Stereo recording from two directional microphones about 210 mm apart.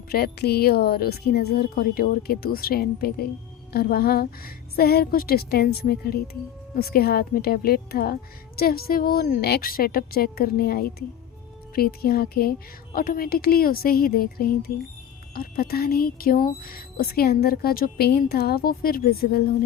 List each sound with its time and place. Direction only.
0.1 s speech: 50° left (ahead or behind)